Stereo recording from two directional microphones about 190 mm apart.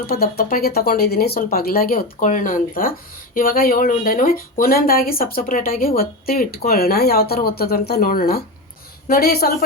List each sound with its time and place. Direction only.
0.1 s speech: 55° left (ahead or behind)